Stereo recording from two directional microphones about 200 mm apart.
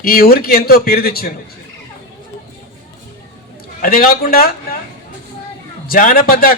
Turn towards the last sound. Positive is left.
turn(degrees=45)  # may be behind; listen again after turning